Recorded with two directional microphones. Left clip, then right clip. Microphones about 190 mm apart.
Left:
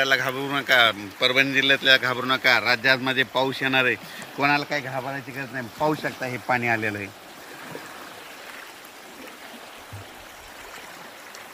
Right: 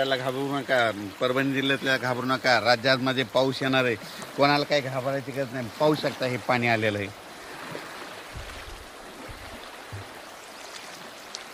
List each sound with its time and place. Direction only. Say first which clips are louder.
0.0 s speech: left 4 dB; 15° right (ahead or behind)
1.2 s a man's voice: left 6 dB; 35° right (ahead or behind); by 7.1 s 55° right (ahead or behind)